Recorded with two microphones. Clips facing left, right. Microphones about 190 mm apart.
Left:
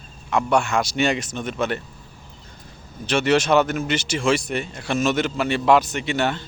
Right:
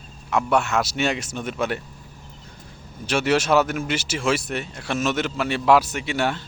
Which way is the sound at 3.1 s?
5° right (ahead or behind).